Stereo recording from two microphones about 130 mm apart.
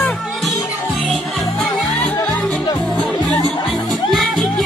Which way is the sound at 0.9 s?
Centre (ahead or behind).